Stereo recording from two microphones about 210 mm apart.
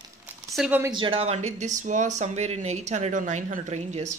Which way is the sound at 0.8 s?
20° right (ahead or behind).